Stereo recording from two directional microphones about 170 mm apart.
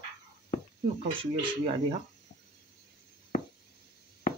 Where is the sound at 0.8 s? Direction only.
40° right (ahead or behind).